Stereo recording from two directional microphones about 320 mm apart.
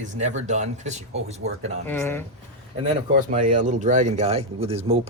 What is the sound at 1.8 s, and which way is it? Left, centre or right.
Speech, centre.